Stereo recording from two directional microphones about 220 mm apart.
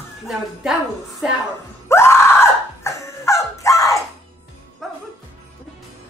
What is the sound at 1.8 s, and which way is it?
Dog, 10° left (ahead or behind).